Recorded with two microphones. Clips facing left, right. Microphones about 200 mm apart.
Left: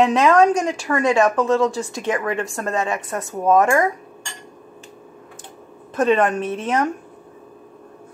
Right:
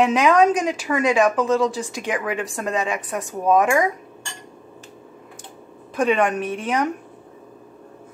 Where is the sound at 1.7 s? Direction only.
15° right (ahead or behind).